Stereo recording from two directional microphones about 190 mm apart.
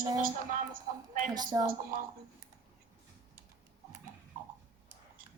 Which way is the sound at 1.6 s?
45° right (ahead or behind).